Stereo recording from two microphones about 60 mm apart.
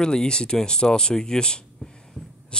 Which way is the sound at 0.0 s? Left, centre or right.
Centre.